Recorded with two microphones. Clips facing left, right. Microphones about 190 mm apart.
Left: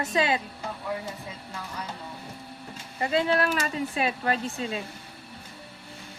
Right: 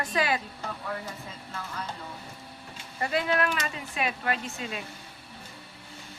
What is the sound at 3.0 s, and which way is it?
Speech, 25° left (ahead or behind).